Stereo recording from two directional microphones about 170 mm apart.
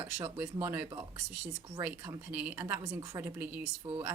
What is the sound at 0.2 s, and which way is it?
Speech, 15° right (ahead or behind).